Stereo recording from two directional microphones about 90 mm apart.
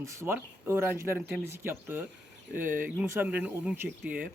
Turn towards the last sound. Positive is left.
turn(degrees=-20)  # may be behind; listen again after turning